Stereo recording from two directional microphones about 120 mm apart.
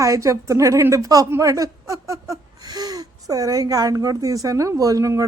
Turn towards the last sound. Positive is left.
turn(degrees=-30)  # may be behind; listen again after turning